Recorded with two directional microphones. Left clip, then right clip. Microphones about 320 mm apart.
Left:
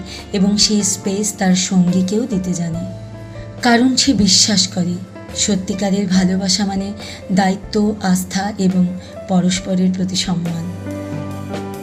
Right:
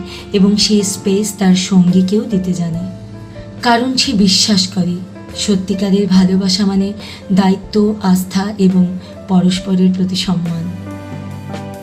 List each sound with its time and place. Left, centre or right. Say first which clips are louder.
0.3 s speech: right 3 dB; left